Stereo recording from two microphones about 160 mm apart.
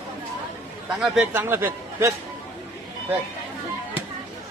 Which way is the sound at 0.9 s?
5° right (ahead or behind).